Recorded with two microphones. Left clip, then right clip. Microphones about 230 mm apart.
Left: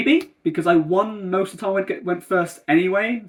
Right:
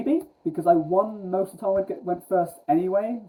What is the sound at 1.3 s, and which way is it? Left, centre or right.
Speech, left.